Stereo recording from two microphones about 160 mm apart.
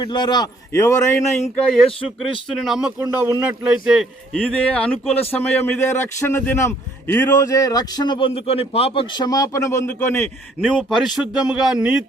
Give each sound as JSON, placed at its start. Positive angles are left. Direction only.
{"t": 0.0, "sound": "a man's voice", "side_deg": 25}
{"t": 1.7, "sound": "speech", "side_deg": 0}
{"t": 3.0, "sound": "speech", "side_deg": -15}
{"t": 3.8, "sound": "speech", "side_deg": 0}
{"t": 4.6, "sound": "speech", "side_deg": 10}
{"t": 10.8, "sound": "speech", "side_deg": 0}